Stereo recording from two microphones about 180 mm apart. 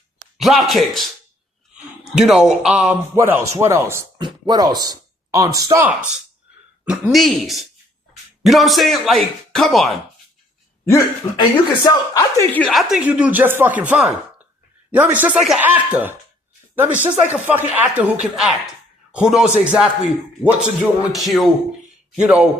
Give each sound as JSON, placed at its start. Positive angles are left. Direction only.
{"t": 0.3, "sound": "speech", "side_deg": 0}
{"t": 2.1, "sound": "speech", "side_deg": 0}
{"t": 3.2, "sound": "speech", "side_deg": -15}
{"t": 7.1, "sound": "speech", "side_deg": 0}
{"t": 10.8, "sound": "speech", "side_deg": 20}
{"t": 12.6, "sound": "speech", "side_deg": 0}